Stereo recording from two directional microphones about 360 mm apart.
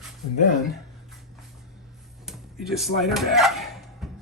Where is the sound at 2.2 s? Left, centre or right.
Centre.